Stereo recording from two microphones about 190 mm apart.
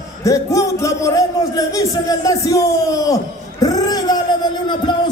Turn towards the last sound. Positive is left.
turn(degrees=20)  # may be behind; listen again after turning